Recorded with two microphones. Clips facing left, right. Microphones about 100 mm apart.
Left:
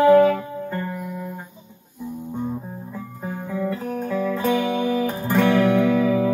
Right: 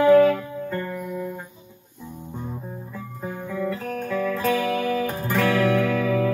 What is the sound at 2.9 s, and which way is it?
Music, 15° left (ahead or behind).